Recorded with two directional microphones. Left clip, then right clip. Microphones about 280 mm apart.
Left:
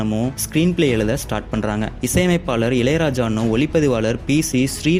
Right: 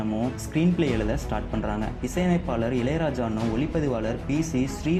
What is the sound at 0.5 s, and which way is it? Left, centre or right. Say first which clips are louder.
Speech: left 8 dB; left.